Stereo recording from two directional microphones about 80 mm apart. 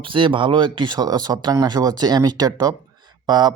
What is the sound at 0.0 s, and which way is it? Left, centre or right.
A man's voice, right.